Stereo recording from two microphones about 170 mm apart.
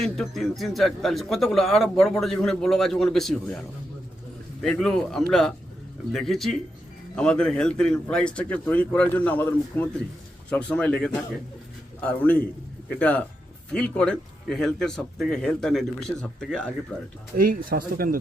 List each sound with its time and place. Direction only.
0.0 s speech: centre (ahead or behind)
4.6 s a man's voice: 5° left (ahead or behind)
17.3 s speech: 55° right (ahead or behind)